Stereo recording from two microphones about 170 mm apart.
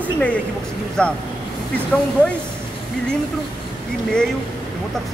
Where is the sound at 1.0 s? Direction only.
5° left (ahead or behind).